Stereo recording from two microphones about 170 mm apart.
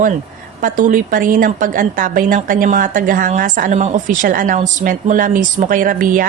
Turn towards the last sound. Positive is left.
turn(degrees=-55)  # may be behind; listen again after turning